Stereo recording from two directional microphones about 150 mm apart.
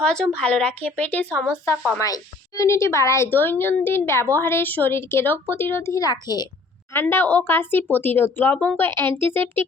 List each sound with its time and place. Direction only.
0.0 s a woman's voice: 5° left (ahead or behind)
2.0 s a woman's voice: 25° left (ahead or behind)
6.9 s a woman's voice: 15° left (ahead or behind)